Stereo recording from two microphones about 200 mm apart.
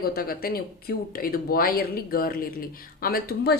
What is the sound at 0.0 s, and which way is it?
A woman's voice, 50° left (ahead or behind).